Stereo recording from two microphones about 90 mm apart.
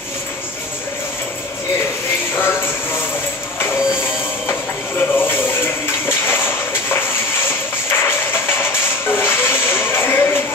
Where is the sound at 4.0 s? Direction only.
25° left (ahead or behind).